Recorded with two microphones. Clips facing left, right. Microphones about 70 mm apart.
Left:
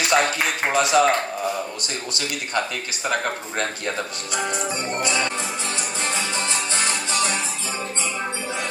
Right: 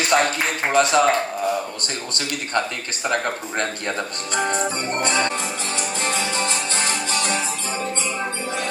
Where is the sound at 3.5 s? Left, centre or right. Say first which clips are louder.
Right 2 dB; right.